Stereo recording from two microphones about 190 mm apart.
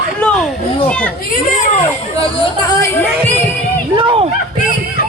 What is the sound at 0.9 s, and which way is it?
Children playing, 5° left (ahead or behind).